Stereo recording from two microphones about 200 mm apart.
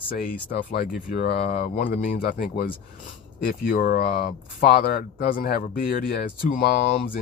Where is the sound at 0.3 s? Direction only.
50° left (ahead or behind).